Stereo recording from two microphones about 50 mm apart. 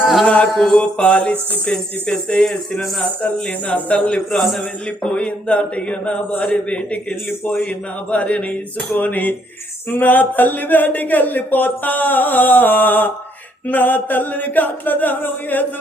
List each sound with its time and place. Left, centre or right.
0.4 s mantra: centre
1.6 s speech: centre
8.1 s speech: left